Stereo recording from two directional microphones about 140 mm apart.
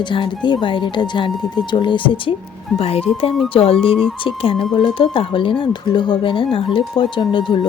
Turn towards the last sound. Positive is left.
turn(degrees=35)  # may be behind; listen again after turning